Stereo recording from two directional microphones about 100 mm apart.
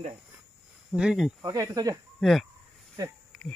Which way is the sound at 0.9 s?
10° right (ahead or behind).